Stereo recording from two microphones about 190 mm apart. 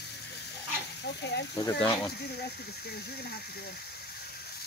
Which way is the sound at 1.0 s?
65° left (ahead or behind).